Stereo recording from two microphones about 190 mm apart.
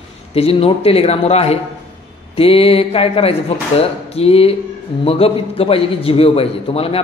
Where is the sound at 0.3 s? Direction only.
30° left (ahead or behind).